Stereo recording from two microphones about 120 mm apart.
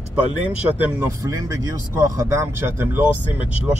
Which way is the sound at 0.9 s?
30° right (ahead or behind).